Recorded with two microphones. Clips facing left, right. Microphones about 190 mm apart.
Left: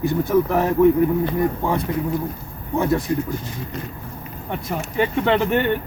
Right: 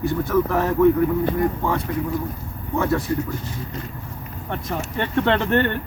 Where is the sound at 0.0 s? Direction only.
15° left (ahead or behind).